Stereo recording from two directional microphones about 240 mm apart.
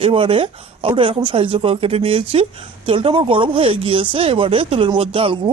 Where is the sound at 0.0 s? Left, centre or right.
Right.